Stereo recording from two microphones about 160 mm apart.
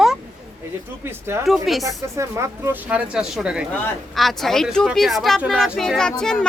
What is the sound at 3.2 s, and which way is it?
A woman's voice, 5° right (ahead or behind).